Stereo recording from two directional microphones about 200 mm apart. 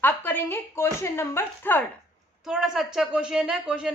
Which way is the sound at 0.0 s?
10° left (ahead or behind).